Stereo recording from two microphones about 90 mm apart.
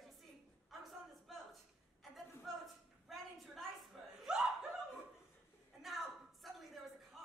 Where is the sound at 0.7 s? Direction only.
Centre (ahead or behind).